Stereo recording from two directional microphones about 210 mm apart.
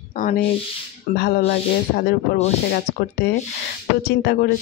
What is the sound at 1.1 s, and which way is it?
Speech, 50° left (ahead or behind).